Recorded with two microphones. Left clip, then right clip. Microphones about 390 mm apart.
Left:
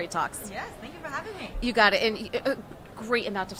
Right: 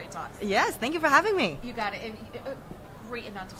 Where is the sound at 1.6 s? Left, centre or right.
Left.